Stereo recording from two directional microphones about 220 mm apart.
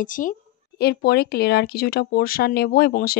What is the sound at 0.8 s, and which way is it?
Speech, 50° left (ahead or behind).